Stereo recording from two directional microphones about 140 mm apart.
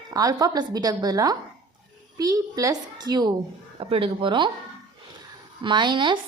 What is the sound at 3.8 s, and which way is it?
Speech, 40° right (ahead or behind).